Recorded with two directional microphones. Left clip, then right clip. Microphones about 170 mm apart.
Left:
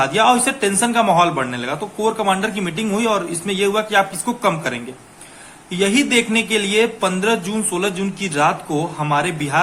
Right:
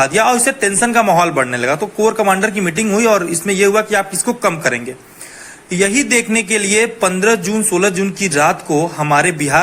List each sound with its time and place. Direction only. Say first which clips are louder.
0.0 s a man's voice: right 2 dB; 25° right (ahead or behind)